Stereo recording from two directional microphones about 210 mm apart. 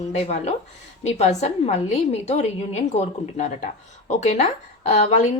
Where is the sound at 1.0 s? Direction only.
35° left (ahead or behind).